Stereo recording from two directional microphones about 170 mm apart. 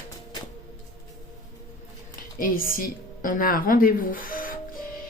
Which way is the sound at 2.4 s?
55° left (ahead or behind).